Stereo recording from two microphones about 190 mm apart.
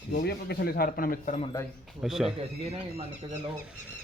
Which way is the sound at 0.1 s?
55° left (ahead or behind).